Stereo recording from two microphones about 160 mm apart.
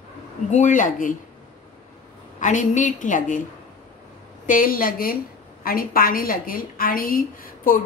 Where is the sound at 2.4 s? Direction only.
50° left (ahead or behind).